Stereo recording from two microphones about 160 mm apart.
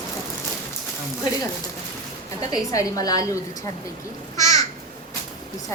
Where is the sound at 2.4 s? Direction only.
20° left (ahead or behind).